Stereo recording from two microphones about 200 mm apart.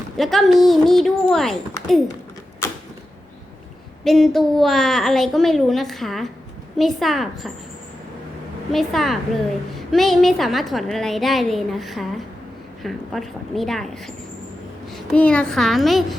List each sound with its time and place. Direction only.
0.2 s a woman's voice: centre (ahead or behind)
4.0 s a woman's voice: centre (ahead or behind)
8.7 s a woman's voice: centre (ahead or behind)
14.9 s a woman's voice: 5° left (ahead or behind)